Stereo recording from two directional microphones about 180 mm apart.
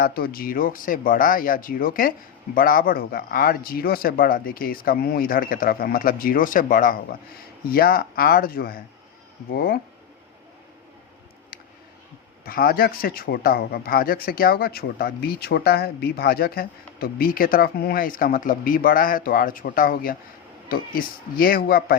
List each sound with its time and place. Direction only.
0.0 s a man's voice: 55° left (ahead or behind)
12.5 s a man's voice: 55° left (ahead or behind)